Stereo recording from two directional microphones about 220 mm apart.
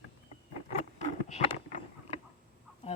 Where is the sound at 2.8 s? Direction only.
25° left (ahead or behind).